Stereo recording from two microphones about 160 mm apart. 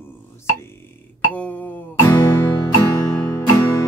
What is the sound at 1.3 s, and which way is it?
Music, 10° left (ahead or behind).